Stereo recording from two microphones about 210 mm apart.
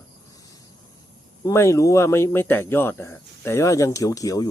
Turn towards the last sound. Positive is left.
turn(degrees=15)  # may be behind; listen again after turning